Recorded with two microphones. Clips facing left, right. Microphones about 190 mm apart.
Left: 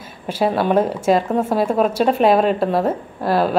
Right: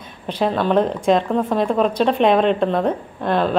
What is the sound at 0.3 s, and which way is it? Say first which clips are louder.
Speech: left 1 dB; 10° left (ahead or behind).